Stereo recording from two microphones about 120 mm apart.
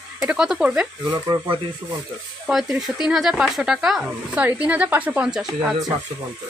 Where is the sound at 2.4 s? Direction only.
5° right (ahead or behind).